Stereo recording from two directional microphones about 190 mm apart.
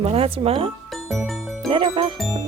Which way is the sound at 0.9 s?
Centre (ahead or behind).